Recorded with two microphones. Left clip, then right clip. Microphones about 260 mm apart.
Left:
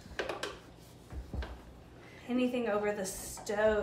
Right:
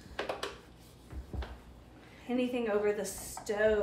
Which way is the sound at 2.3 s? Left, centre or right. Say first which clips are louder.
Even; centre.